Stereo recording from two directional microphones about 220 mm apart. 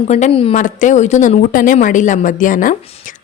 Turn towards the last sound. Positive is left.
turn(degrees=35)  # may be behind; listen again after turning